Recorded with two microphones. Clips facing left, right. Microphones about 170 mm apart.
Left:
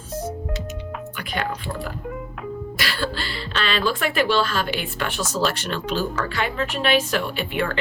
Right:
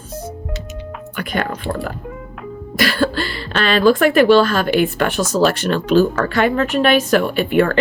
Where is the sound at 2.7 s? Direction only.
50° right (ahead or behind).